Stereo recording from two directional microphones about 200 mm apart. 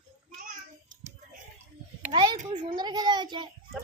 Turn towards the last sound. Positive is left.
turn(degrees=-20)  # may be behind; listen again after turning